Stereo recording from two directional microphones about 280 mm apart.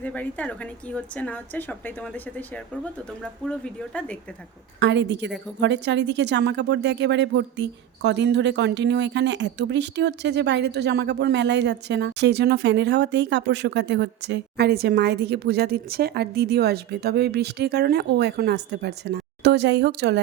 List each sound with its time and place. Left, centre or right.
0.0 s a woman's voice: centre
3.4 s a woman's voice: centre
4.8 s speech: right